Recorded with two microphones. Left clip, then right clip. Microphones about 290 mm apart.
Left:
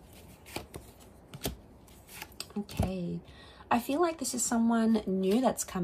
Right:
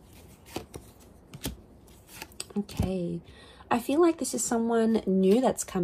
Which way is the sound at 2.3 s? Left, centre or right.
Right.